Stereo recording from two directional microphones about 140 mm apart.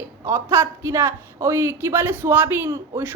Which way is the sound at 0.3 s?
20° right (ahead or behind).